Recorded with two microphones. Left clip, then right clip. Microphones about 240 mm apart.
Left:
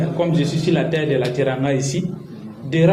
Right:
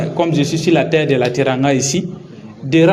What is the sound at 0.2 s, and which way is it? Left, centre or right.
A man's voice, right.